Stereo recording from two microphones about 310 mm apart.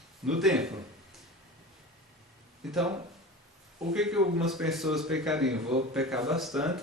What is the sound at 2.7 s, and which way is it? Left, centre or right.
Speech, centre.